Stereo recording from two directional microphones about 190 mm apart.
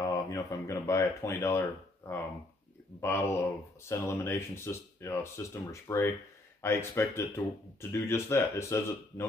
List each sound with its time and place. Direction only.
0.0 s speech: 20° left (ahead or behind)